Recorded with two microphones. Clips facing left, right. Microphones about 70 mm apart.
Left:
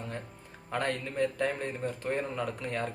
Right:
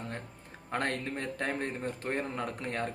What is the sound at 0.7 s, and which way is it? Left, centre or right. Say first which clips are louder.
Speech: left 1 dB; right.